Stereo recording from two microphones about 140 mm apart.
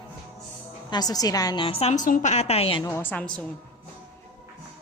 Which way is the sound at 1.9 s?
65° left (ahead or behind).